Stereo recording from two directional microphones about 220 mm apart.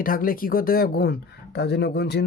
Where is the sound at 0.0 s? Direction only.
40° left (ahead or behind).